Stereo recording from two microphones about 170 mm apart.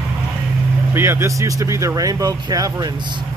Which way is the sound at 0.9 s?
15° right (ahead or behind).